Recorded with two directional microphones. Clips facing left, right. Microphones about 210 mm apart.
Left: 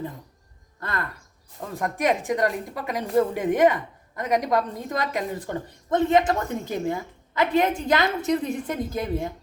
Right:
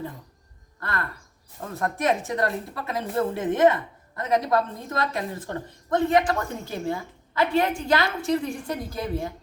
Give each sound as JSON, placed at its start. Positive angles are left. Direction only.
{"t": 1.7, "sound": "a woman's voice", "side_deg": 15}